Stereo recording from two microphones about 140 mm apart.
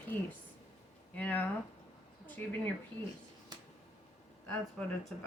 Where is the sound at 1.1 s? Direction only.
10° left (ahead or behind).